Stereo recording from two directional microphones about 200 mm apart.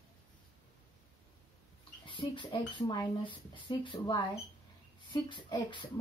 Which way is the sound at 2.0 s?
25° left (ahead or behind).